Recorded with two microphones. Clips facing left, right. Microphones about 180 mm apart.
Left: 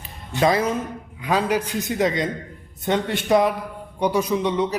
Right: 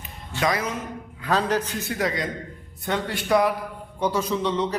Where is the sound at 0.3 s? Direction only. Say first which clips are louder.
Left 5 dB; 25° left (ahead or behind).